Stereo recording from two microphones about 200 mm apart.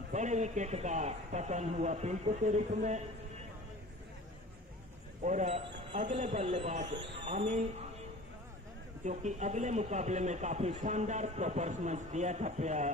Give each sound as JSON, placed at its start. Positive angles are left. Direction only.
{"t": 0.1, "sound": "a man's voice", "side_deg": -35}
{"t": 5.2, "sound": "a man's voice", "side_deg": -35}
{"t": 6.9, "sound": "speech", "side_deg": -60}
{"t": 7.2, "sound": "a man's voice", "side_deg": -35}
{"t": 9.0, "sound": "a man's voice", "side_deg": -35}